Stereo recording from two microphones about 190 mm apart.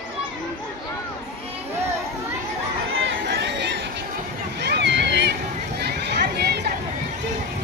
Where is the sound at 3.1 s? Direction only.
65° right (ahead or behind).